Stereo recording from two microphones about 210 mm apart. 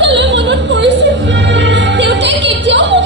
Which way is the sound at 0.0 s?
55° right (ahead or behind).